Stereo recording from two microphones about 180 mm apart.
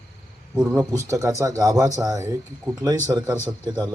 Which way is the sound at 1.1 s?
20° right (ahead or behind).